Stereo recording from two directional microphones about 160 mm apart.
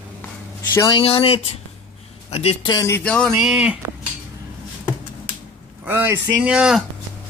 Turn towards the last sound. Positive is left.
turn(degrees=-5)  # may be behind; listen again after turning